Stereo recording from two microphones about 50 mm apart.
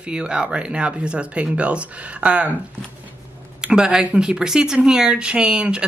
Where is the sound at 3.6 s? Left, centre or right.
Centre.